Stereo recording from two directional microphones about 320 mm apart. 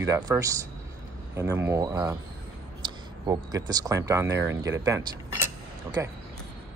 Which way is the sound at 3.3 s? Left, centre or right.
Centre.